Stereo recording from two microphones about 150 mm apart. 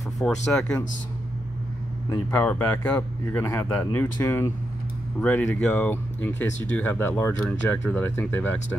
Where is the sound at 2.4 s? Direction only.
10° left (ahead or behind).